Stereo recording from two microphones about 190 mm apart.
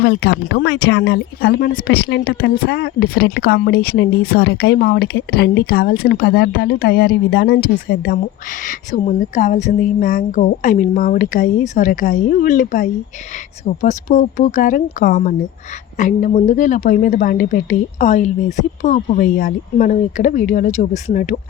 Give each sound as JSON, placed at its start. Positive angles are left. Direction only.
{"t": 0.0, "sound": "speech", "side_deg": 60}
{"t": 8.6, "sound": "a woman's voice", "side_deg": 40}